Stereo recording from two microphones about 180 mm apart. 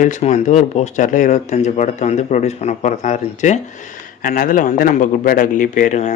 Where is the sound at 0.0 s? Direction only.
40° left (ahead or behind).